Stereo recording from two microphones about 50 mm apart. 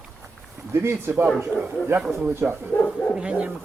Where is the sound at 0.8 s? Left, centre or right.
Right.